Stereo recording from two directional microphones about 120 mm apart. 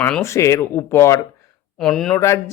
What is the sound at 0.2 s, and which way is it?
Speech, 25° left (ahead or behind).